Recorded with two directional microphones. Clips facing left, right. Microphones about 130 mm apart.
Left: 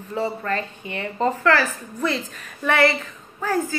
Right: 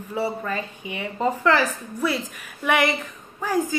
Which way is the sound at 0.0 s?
10° right (ahead or behind).